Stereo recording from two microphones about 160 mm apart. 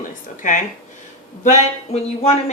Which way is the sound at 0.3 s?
55° left (ahead or behind).